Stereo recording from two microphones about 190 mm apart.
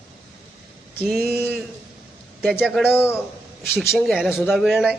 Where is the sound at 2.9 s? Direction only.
15° left (ahead or behind).